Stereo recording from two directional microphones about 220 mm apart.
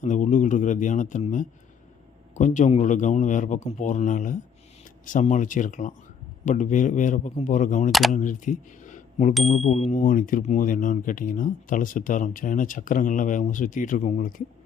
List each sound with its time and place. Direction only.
0.0 s speech: 35° left (ahead or behind)